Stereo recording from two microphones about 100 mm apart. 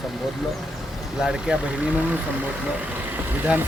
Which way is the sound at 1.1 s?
5° right (ahead or behind).